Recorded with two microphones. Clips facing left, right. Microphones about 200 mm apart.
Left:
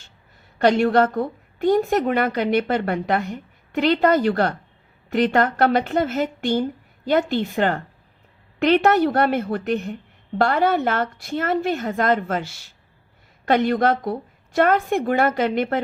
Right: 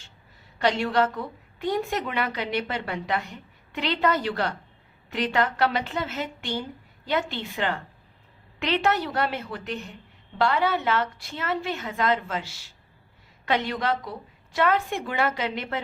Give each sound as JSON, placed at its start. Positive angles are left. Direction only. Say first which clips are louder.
{"t": 0.6, "sound": "a woman's voice", "louder": "left 7 dB", "side_deg": 50}